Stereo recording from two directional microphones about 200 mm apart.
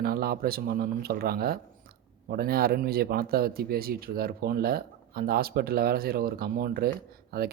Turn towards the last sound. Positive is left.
turn(degrees=-50)  # may be behind; listen again after turning